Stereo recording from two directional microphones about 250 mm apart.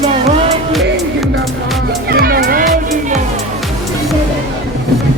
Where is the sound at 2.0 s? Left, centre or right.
Right.